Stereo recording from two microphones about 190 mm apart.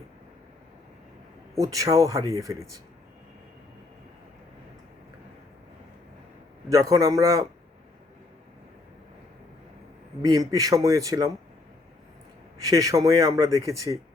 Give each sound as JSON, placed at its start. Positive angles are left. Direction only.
{"t": 1.5, "sound": "speech", "side_deg": -15}
{"t": 6.7, "sound": "speech", "side_deg": -15}
{"t": 10.2, "sound": "speech", "side_deg": -20}
{"t": 12.6, "sound": "speech", "side_deg": -15}